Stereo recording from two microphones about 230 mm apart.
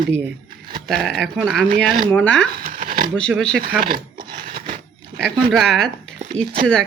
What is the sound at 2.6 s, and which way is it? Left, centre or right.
Shuffling cards, right.